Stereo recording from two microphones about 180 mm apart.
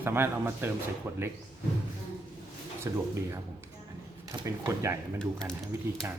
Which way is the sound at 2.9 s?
20° right (ahead or behind).